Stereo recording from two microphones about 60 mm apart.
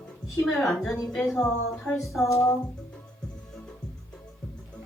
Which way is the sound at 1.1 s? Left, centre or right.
Centre.